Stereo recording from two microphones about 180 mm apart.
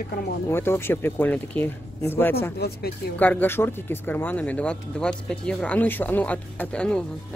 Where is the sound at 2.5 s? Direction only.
65° left (ahead or behind).